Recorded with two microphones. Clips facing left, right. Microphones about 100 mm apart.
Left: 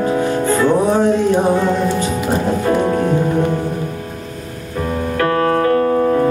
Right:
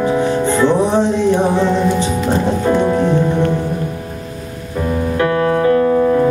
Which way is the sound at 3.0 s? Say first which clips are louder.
Right 1 dB; 10° left (ahead or behind).